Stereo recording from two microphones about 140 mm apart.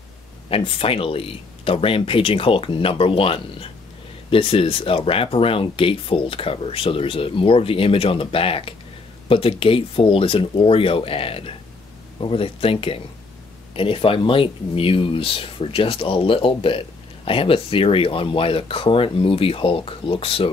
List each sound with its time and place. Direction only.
0.5 s speech: 40° left (ahead or behind)